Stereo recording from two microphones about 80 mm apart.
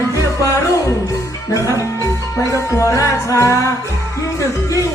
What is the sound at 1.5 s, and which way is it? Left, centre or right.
Music, left.